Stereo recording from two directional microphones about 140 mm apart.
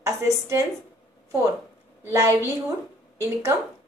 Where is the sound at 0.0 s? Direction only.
20° right (ahead or behind).